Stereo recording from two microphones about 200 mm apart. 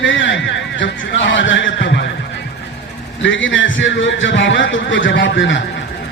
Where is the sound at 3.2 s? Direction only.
70° left (ahead or behind).